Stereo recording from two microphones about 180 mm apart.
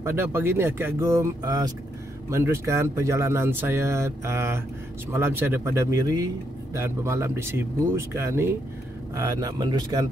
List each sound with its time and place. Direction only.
0.0 s a man's voice: 10° right (ahead or behind)